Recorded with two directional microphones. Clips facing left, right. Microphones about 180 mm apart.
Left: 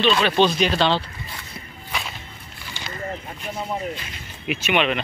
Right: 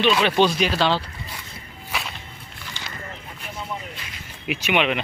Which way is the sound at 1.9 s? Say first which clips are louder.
Even; centre (ahead or behind).